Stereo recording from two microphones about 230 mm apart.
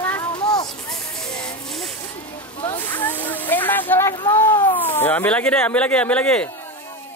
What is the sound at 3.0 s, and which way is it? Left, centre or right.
Speech, centre.